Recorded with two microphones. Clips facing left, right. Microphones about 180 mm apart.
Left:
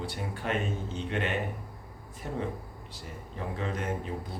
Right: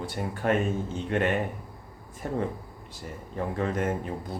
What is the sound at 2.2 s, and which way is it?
Speech, 50° right (ahead or behind).